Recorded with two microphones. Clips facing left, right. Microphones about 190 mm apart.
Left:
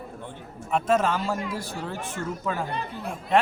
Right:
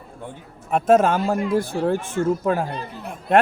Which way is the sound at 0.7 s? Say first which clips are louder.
Right 6 dB; 50° right (ahead or behind).